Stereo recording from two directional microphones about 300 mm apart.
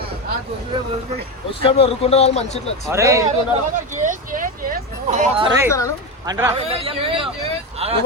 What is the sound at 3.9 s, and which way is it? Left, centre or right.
A man's voice, right.